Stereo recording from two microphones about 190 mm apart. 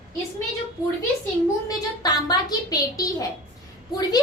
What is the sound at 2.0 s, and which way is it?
A woman's voice, 20° left (ahead or behind).